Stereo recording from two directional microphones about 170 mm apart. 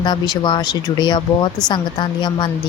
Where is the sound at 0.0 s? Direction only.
25° left (ahead or behind).